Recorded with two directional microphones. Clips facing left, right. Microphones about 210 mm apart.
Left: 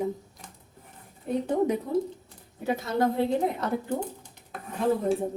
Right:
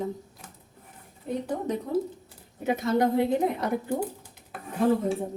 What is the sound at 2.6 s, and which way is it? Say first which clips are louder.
A woman's voice: right 2 dB; 15° right (ahead or behind).